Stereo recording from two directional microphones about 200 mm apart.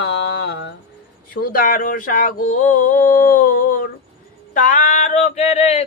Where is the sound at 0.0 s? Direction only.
55° left (ahead or behind).